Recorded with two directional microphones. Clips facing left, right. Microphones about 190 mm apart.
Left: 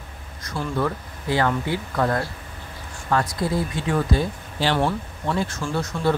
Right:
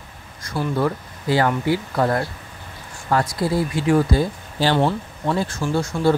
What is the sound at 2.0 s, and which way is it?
Speech, 25° right (ahead or behind).